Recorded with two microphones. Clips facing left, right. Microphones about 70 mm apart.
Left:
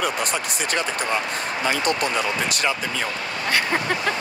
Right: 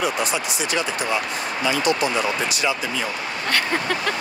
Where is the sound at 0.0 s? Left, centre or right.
Left.